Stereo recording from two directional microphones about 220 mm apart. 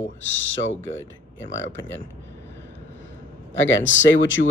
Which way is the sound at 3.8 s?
60° left (ahead or behind).